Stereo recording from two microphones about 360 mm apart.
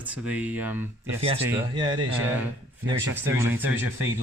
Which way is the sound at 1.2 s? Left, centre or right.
Centre.